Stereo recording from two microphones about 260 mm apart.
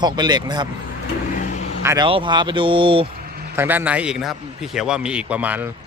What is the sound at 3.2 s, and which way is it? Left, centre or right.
Vehicle, right.